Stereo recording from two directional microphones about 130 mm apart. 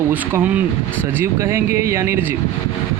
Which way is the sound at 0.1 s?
15° right (ahead or behind).